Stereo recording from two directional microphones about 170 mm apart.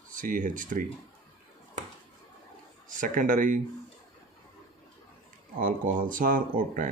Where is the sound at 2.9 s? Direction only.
50° right (ahead or behind).